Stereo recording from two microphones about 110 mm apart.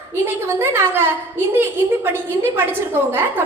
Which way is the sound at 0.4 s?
20° right (ahead or behind).